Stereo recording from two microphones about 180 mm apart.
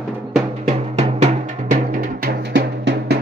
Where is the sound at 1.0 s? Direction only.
35° right (ahead or behind); by 3.2 s 70° right (ahead or behind).